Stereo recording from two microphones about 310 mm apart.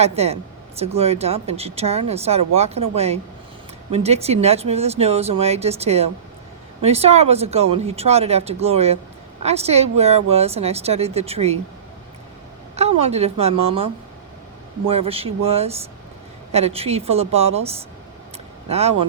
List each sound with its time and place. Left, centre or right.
0.0 s speech: centre
13.1 s speech: centre
14.8 s speech: centre